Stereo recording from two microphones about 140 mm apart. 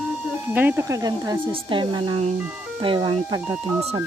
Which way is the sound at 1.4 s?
35° right (ahead or behind).